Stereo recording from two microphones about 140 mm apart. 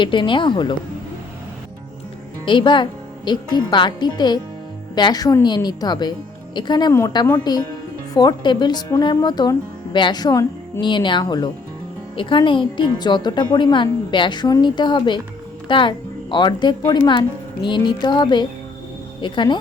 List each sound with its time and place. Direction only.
0.0 s speech: 35° left (ahead or behind)
2.4 s a woman's voice: 35° left (ahead or behind)